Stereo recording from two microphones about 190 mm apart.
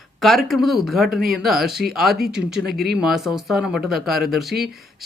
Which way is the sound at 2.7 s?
55° right (ahead or behind).